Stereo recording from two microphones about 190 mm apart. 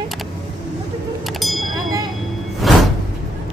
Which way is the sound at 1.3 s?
Centre (ahead or behind).